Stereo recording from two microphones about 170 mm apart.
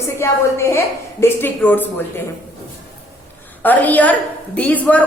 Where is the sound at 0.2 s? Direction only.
15° left (ahead or behind).